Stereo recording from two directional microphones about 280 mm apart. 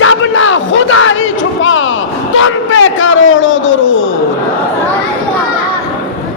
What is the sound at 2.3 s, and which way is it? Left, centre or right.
A man's voice, left.